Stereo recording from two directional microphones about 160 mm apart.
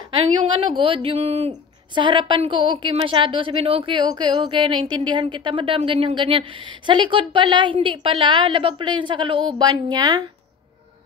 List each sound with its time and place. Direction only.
0.7 s a woman's voice: 35° right (ahead or behind)
1.5 s a woman's voice: 30° right (ahead or behind)